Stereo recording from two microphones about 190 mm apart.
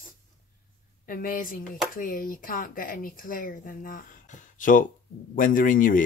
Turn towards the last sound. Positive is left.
turn(degrees=45)  # may be behind; listen again after turning